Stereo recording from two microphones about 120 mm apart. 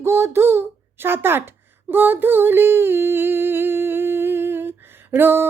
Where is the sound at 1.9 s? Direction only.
15° right (ahead or behind).